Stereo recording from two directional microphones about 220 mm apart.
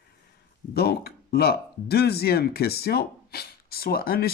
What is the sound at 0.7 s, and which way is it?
Speech, 45° left (ahead or behind).